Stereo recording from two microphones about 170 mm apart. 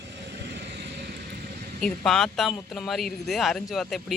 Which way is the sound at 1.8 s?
5° left (ahead or behind).